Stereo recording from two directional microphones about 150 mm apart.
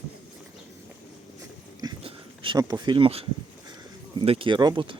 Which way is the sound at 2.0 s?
30° right (ahead or behind).